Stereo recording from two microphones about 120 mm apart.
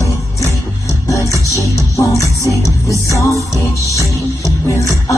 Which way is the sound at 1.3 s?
25° left (ahead or behind).